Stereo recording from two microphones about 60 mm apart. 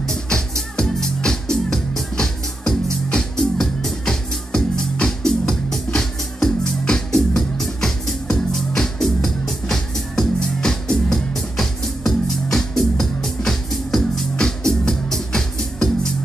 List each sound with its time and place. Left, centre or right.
0.0 s music: centre